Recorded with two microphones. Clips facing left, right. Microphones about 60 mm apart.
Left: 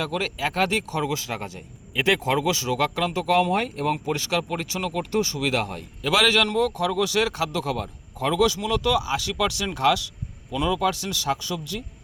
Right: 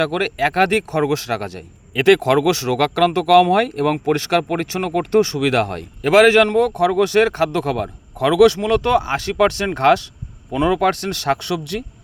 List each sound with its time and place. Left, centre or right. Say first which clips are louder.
0.0 s a man's voice: right 8 dB; right
6.1 s a man's voice: right 9 dB; right